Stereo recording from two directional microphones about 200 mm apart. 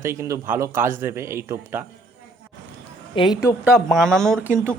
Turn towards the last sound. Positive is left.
turn(degrees=-10)  # may be behind; listen again after turning